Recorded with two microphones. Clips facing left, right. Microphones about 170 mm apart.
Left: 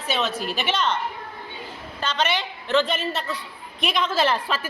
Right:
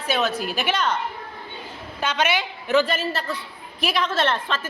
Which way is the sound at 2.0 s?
10° right (ahead or behind).